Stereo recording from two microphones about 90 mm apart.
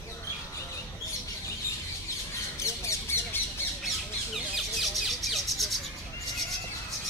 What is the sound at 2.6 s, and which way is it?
Squawk, 35° left (ahead or behind).